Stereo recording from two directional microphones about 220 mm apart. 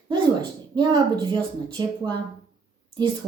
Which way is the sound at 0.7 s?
20° right (ahead or behind).